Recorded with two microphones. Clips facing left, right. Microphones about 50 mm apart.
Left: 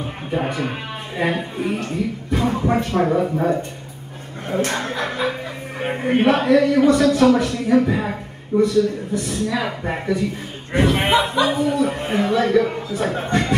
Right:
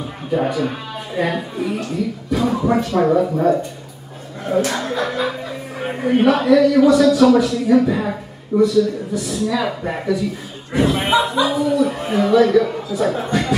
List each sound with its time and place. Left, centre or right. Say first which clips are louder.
0.3 s speech: right 4 dB; left
4.5 s speech: right 3 dB; left
10.1 s speech: right 1 dB; left